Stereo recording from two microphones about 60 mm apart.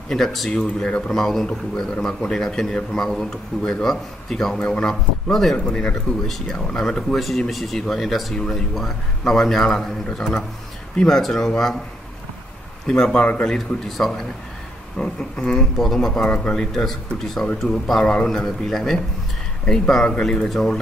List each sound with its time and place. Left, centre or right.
0.1 s a man's voice: centre
12.8 s a man's voice: centre